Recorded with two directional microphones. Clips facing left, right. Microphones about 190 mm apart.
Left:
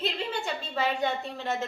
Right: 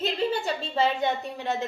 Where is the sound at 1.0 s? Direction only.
15° right (ahead or behind).